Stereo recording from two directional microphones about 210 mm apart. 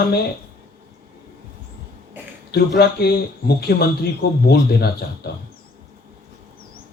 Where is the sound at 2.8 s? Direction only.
50° left (ahead or behind).